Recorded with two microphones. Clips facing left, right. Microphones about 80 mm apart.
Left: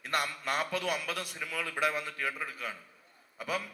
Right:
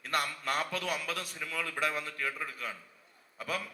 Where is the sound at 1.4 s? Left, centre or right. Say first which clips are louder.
Left 2 dB; left.